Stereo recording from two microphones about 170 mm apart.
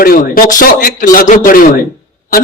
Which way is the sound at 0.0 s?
55° left (ahead or behind).